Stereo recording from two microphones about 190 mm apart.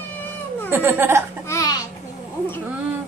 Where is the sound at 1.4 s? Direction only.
15° left (ahead or behind).